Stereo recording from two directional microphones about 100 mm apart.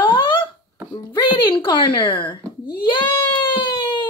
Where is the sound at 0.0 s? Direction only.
55° left (ahead or behind).